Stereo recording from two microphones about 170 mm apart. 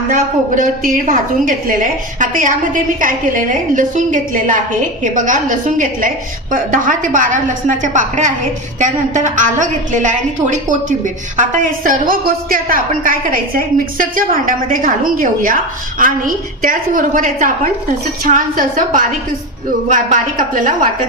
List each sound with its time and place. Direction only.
0.1 s a woman's voice: 50° right (ahead or behind)